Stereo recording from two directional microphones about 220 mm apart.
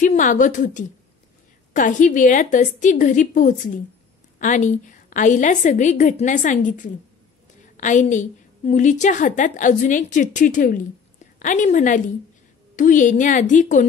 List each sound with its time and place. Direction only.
0.0 s a woman's voice: 35° left (ahead or behind)